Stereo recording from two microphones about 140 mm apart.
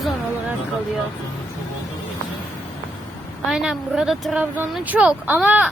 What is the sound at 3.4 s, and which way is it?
Speech, 5° right (ahead or behind).